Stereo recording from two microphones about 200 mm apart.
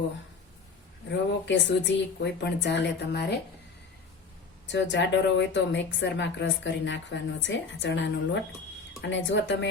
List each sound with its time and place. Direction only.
1.1 s a woman's voice: 65° left (ahead or behind)
4.6 s a woman's voice: 65° left (ahead or behind)